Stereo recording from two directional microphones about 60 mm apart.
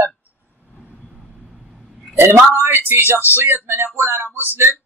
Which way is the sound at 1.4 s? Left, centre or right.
Centre.